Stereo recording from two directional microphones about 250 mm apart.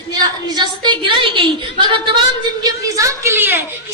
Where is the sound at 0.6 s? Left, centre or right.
Centre.